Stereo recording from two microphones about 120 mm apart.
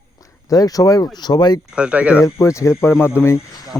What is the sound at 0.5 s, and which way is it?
Speech, 30° left (ahead or behind).